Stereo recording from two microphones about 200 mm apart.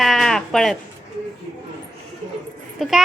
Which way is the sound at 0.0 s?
Centre (ahead or behind).